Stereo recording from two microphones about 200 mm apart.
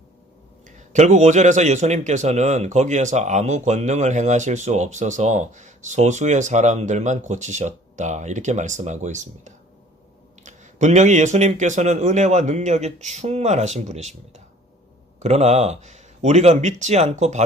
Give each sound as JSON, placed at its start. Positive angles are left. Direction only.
{"t": 0.9, "sound": "a man's voice", "side_deg": -35}